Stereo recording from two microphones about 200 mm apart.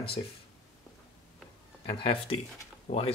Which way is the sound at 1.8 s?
25° left (ahead or behind).